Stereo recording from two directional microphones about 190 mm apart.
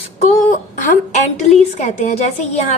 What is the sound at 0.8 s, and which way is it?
A woman's voice, 40° left (ahead or behind).